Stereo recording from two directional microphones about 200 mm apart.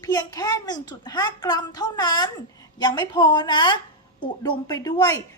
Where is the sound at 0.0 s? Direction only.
20° left (ahead or behind).